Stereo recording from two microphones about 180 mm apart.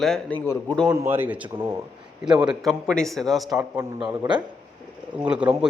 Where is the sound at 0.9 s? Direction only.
10° right (ahead or behind).